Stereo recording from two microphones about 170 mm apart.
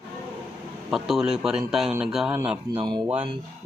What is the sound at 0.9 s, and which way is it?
Speech, centre (ahead or behind).